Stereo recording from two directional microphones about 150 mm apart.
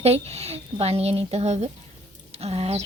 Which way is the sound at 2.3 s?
45° right (ahead or behind).